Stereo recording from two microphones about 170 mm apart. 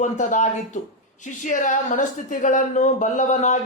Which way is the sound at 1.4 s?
50° left (ahead or behind).